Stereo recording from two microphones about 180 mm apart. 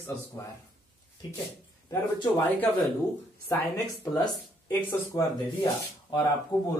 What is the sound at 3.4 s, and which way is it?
Speech, 15° left (ahead or behind).